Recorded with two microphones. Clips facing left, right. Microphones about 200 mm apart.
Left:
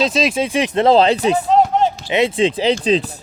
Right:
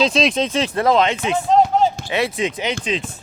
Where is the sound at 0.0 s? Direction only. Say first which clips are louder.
Even; 5° left (ahead or behind); by 1.4 s 35° left (ahead or behind).